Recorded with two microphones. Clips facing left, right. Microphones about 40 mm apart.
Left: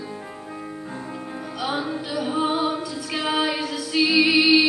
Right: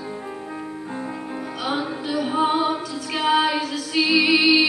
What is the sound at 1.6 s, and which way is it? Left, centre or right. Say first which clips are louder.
Female singing: right 1 dB; centre.